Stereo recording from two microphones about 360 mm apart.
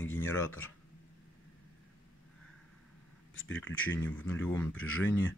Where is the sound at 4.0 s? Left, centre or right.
Centre.